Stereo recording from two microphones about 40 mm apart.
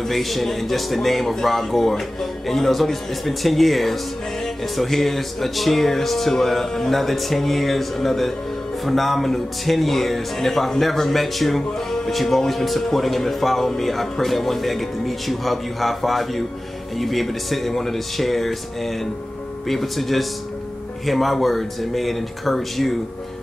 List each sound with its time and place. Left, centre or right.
0.0 s speech: centre